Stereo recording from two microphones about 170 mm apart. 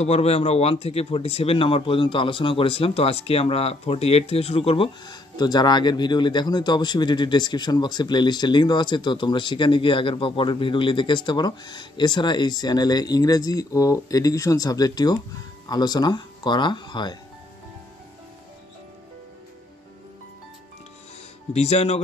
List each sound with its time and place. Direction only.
0.0 s speech: 35° left (ahead or behind)
21.5 s speech: 40° left (ahead or behind)